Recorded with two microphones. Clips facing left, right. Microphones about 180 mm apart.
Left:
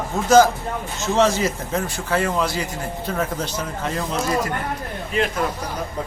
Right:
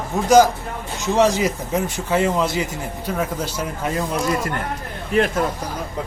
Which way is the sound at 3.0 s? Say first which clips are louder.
Right 1 dB; 10° right (ahead or behind).